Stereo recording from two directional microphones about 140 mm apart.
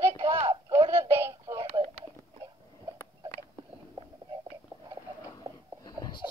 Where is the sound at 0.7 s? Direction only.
20° right (ahead or behind).